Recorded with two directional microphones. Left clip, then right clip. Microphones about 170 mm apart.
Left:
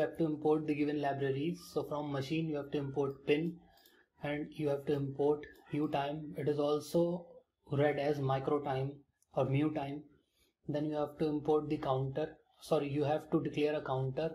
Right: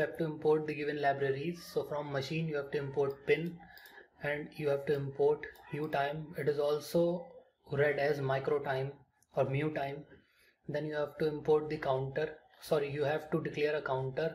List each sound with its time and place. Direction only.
0.0 s speech: 30° left (ahead or behind)